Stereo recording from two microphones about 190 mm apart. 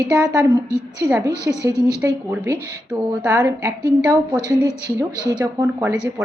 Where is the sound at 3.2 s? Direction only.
15° right (ahead or behind).